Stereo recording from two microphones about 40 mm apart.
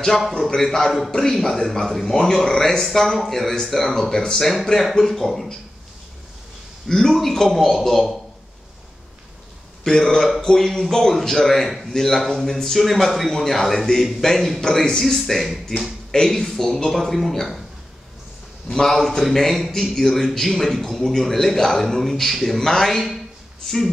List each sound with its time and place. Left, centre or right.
0.6 s a man's voice: centre
4.4 s a man's voice: centre
6.9 s a man's voice: centre
9.8 s a man's voice: centre
18.7 s a man's voice: centre